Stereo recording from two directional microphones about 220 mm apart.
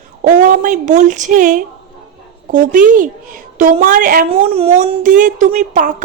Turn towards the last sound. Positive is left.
turn(degrees=-35)  # may be behind; listen again after turning